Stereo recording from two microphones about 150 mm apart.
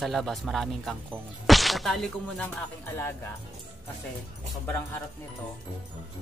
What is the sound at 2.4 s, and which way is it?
Speech, 15° left (ahead or behind).